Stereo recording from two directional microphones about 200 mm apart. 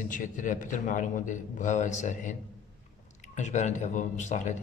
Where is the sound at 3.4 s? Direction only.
35° left (ahead or behind).